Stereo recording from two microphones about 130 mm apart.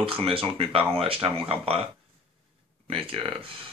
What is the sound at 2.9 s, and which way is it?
Speech, 45° right (ahead or behind).